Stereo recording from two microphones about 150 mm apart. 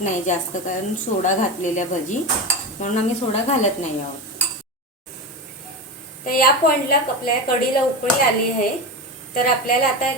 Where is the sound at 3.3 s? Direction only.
45° left (ahead or behind).